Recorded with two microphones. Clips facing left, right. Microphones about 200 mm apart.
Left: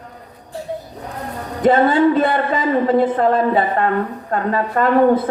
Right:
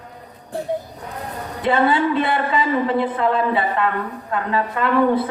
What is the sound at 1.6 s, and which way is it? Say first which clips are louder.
A woman's voice: left 5 dB; 45° left (ahead or behind).